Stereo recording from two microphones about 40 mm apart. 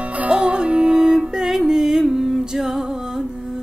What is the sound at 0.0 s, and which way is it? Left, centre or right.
Music, right.